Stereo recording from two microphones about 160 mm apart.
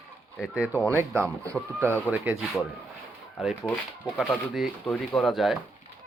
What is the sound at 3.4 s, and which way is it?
Speech, centre (ahead or behind).